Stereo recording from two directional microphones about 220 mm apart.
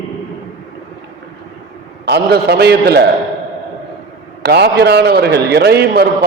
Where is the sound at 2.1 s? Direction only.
50° right (ahead or behind).